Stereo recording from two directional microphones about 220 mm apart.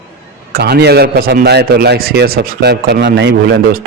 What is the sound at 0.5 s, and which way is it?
A man's voice, 45° right (ahead or behind).